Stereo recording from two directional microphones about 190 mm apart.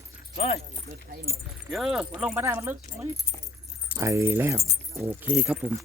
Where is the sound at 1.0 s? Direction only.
55° right (ahead or behind).